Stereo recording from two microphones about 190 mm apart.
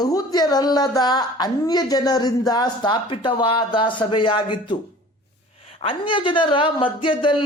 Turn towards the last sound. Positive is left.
turn(degrees=25)  # may be behind; listen again after turning